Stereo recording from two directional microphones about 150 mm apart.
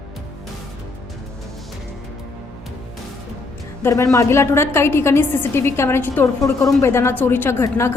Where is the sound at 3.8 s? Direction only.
20° left (ahead or behind).